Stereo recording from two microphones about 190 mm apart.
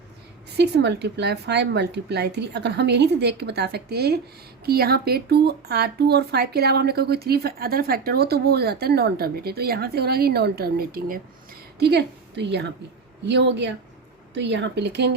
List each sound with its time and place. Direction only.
0.5 s a woman's voice: 60° right (ahead or behind)